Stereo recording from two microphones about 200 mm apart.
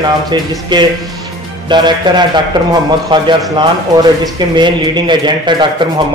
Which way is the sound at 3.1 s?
25° right (ahead or behind).